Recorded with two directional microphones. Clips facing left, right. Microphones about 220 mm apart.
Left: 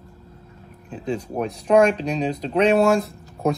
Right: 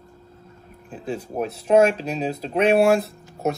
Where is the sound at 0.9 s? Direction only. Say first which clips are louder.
Left 2 dB; 5° right (ahead or behind).